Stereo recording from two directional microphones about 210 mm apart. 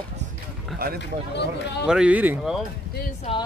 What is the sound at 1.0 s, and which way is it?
Speech, 55° left (ahead or behind).